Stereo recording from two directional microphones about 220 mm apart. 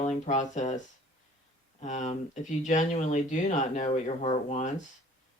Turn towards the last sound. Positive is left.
turn(degrees=30)  # may be behind; listen again after turning